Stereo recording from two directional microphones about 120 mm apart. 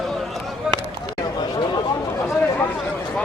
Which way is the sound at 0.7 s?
5° right (ahead or behind).